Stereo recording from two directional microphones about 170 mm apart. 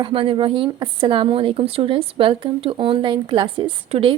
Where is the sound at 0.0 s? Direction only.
30° right (ahead or behind).